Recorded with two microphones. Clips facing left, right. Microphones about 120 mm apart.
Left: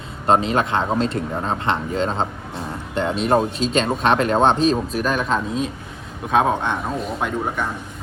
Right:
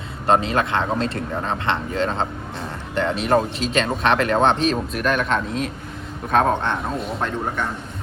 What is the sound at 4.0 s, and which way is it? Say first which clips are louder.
Speech: left 1 dB; 35° left (ahead or behind).